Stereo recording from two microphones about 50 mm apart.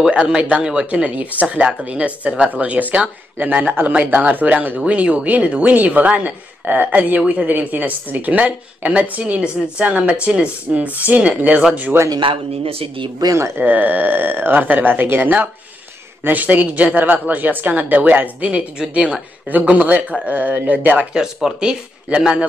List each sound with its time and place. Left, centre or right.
0.1 s speech: right
11.9 s a man's voice: right
13.6 s speech: right
21.1 s speech: centre